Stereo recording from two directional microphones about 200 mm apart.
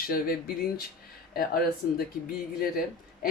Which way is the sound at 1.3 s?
50° left (ahead or behind).